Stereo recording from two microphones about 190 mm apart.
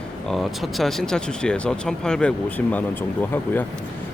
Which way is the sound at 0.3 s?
Centre (ahead or behind).